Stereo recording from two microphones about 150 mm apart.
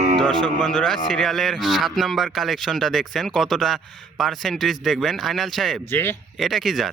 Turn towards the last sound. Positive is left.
turn(degrees=0)  # may be behind; listen again after turning